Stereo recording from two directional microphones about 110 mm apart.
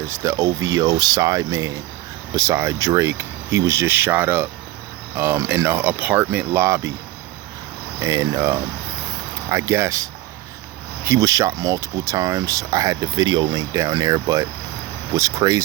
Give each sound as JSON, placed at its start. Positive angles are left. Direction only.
{"t": 0.1, "sound": "speech", "side_deg": -30}
{"t": 7.9, "sound": "speech", "side_deg": -30}